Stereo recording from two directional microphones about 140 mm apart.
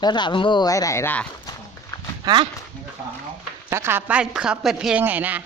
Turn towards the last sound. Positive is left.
turn(degrees=-10)  # may be behind; listen again after turning